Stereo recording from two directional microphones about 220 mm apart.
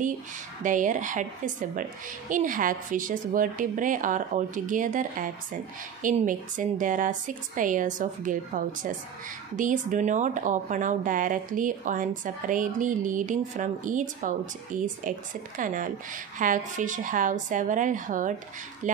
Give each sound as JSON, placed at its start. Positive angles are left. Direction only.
{"t": 0.7, "sound": "speech", "side_deg": -35}